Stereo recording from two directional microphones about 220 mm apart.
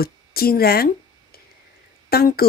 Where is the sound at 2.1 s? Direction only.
45° left (ahead or behind).